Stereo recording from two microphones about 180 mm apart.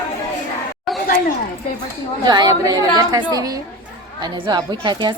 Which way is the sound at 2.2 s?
20° right (ahead or behind).